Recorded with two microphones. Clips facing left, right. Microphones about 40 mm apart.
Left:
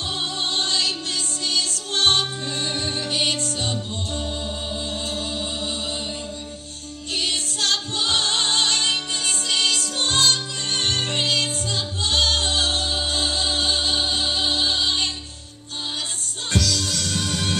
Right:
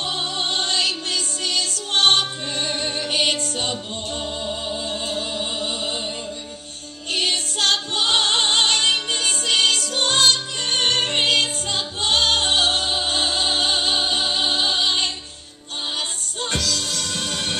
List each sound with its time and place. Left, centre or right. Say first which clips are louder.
0.1 s music: left 1 dB; right
7.1 s music: right 3 dB; right
16.5 s music: left 3 dB; centre
17.2 s music: even; right